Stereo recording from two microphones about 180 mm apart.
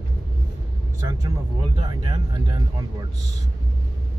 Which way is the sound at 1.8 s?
25° right (ahead or behind).